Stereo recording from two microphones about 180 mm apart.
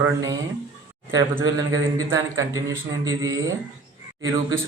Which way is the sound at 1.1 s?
15° right (ahead or behind).